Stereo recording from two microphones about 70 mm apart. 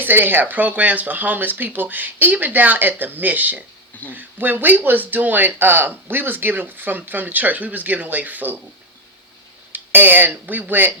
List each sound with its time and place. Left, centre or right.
0.0 s speech: right
9.7 s speech: right